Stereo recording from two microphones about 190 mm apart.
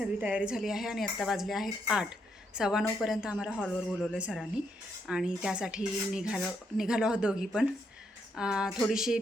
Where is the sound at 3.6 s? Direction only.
5° left (ahead or behind).